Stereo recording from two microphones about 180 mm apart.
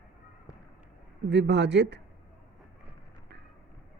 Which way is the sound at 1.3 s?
75° right (ahead or behind).